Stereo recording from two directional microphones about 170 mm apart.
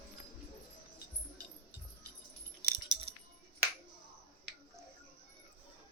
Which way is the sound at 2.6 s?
70° right (ahead or behind).